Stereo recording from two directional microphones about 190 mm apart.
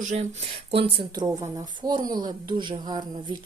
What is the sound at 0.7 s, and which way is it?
Speech, 30° right (ahead or behind).